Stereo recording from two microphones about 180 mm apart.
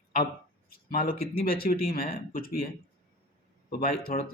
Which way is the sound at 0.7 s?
55° left (ahead or behind).